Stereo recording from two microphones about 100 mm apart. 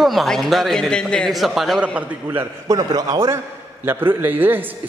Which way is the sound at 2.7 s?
40° right (ahead or behind).